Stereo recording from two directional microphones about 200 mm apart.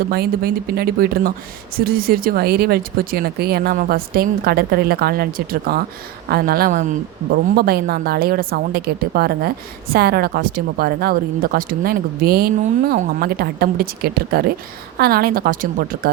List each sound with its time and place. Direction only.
0.1 s a woman's voice: 50° right (ahead or behind)